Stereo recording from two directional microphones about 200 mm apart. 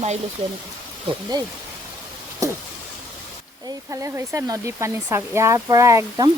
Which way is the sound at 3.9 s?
15° right (ahead or behind).